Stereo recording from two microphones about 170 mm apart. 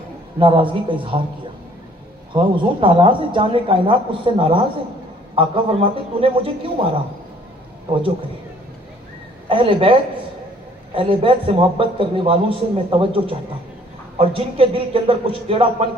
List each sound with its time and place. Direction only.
0.3 s speech: 30° right (ahead or behind)
2.3 s a man's voice: 30° right (ahead or behind)
9.5 s a man's voice: 30° right (ahead or behind)